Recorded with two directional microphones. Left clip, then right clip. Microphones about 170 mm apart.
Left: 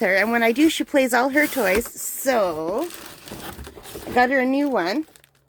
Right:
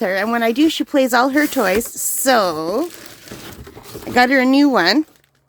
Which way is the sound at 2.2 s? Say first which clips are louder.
Right 5 dB; 45° right (ahead or behind).